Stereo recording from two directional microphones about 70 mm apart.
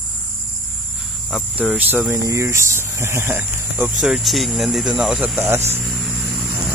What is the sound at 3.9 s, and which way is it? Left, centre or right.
Speech, centre.